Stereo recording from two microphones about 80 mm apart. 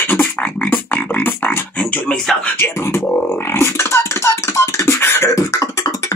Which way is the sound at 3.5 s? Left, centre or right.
Left.